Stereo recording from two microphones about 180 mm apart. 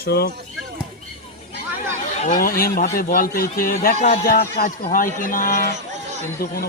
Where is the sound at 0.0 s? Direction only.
60° left (ahead or behind).